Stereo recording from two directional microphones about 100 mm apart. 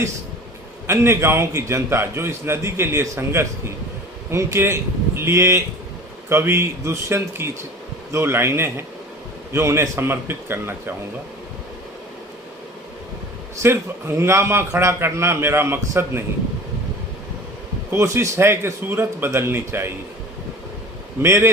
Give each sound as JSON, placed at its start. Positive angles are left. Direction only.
{"t": 0.9, "sound": "a man's voice", "side_deg": -25}
{"t": 13.6, "sound": "a man's voice", "side_deg": -25}
{"t": 17.9, "sound": "a man's voice", "side_deg": -30}
{"t": 21.2, "sound": "a man's voice", "side_deg": -25}